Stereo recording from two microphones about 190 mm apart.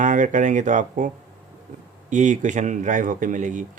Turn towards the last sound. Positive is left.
turn(degrees=-40)  # may be behind; listen again after turning